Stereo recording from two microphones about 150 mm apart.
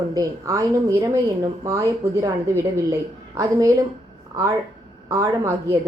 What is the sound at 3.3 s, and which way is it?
Speech, 20° right (ahead or behind).